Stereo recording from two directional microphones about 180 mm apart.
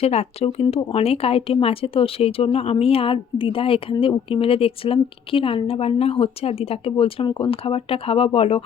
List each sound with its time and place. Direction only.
0.0 s speech: 35° left (ahead or behind)